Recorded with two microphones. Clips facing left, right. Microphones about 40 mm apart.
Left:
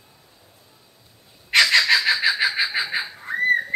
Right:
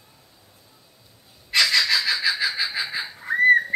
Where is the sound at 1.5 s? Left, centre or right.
Left.